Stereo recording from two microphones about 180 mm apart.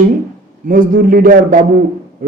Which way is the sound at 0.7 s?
50° right (ahead or behind).